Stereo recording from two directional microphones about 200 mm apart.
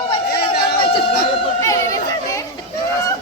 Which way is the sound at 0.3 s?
55° left (ahead or behind).